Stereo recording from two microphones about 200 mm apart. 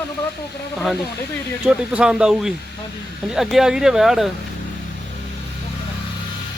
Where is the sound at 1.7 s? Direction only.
5° right (ahead or behind).